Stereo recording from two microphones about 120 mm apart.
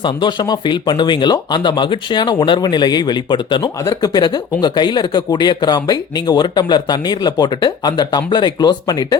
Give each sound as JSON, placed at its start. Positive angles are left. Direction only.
{"t": 0.0, "sound": "speech", "side_deg": 40}